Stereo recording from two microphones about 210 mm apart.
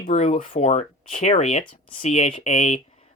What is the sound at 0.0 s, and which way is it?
Speech, 30° left (ahead or behind).